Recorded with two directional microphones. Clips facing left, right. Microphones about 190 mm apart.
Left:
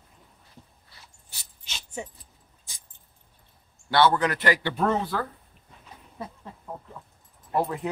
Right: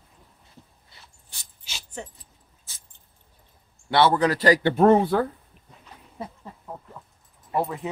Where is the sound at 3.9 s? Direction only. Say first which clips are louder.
Right 2 dB; 25° right (ahead or behind); by 5.1 s 50° right (ahead or behind).